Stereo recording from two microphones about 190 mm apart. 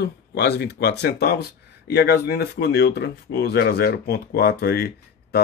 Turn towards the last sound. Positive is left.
turn(degrees=55)  # may be behind; listen again after turning